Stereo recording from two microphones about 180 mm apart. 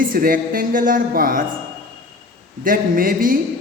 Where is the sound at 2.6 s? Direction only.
50° right (ahead or behind).